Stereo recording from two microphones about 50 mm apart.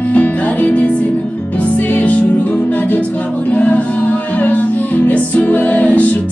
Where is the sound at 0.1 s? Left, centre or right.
Left.